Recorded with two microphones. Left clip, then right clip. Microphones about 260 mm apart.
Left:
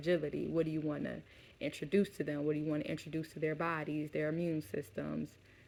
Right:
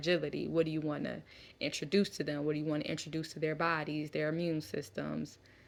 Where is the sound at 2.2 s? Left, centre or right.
Right.